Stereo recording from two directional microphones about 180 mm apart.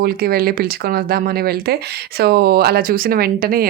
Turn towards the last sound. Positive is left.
turn(degrees=-55)  # may be behind; listen again after turning